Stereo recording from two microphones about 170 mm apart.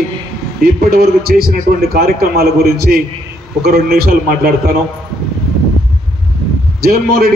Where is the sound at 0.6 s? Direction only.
65° right (ahead or behind).